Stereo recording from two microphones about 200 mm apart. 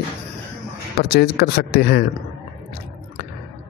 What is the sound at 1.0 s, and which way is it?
Speech, 50° left (ahead or behind).